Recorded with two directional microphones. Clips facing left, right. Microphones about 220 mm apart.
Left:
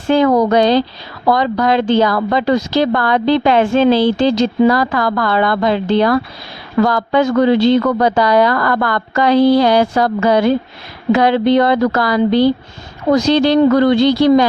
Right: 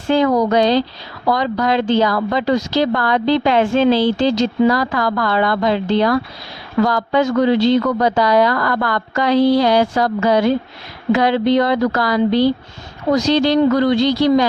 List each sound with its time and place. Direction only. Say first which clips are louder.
0.1 s speech: left 3 dB; 60° left (ahead or behind)